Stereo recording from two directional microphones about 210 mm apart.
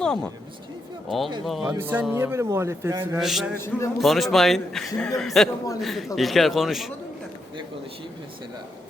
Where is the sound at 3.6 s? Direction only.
10° left (ahead or behind).